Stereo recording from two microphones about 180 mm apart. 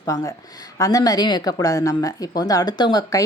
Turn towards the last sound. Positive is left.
turn(degrees=25)  # may be behind; listen again after turning